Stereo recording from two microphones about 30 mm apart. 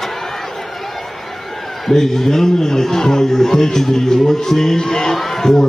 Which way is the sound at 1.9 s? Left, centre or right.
Centre.